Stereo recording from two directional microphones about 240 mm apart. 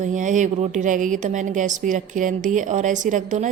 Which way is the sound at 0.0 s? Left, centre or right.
Right.